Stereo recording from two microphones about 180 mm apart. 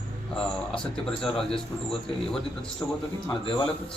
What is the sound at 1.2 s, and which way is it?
A man's voice, 5° left (ahead or behind).